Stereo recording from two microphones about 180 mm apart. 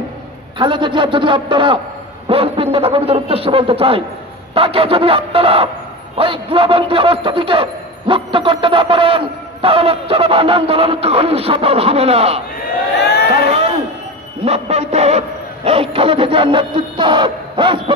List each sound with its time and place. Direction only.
0.6 s a man's voice: 25° right (ahead or behind)
12.5 s a sound: 65° left (ahead or behind)
14.4 s a man's voice: 35° right (ahead or behind)